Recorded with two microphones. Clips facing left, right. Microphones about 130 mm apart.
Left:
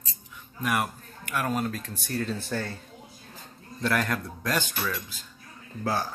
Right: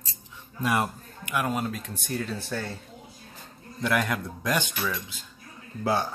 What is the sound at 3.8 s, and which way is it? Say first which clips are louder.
Speech: right 1 dB; 15° right (ahead or behind).